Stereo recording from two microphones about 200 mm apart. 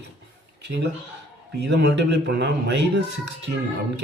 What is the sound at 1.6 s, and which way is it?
Speech, 55° right (ahead or behind).